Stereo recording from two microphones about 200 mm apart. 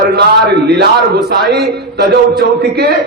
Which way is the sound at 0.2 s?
55° right (ahead or behind).